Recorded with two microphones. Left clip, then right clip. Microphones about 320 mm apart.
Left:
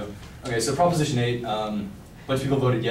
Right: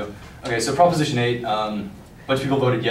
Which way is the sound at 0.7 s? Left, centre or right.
Centre.